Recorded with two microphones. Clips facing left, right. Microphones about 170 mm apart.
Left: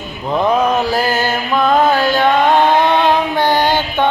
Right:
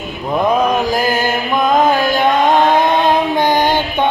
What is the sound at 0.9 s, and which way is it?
Mantra, 15° right (ahead or behind).